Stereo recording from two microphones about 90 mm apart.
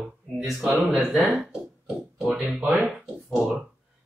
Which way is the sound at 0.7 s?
15° right (ahead or behind).